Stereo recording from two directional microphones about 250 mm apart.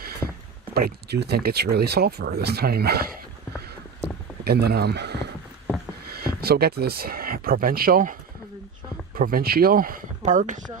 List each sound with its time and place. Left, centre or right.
0.7 s speech: right
4.4 s speech: right
9.1 s speech: right